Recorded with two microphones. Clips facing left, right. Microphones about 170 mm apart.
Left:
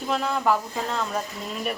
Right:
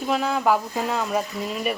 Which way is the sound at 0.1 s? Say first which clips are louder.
Right 2 dB; 5° right (ahead or behind).